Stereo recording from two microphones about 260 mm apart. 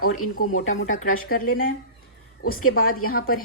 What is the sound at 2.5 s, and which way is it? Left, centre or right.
Speech, left.